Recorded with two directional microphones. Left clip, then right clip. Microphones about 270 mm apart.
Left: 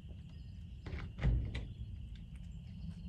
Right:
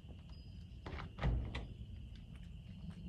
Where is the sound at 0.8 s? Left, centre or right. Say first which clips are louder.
Right 1 dB; centre.